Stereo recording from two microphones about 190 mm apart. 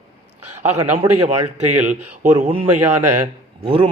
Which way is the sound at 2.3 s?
30° right (ahead or behind).